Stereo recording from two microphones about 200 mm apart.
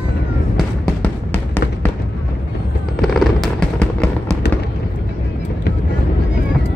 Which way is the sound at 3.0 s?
Centre (ahead or behind).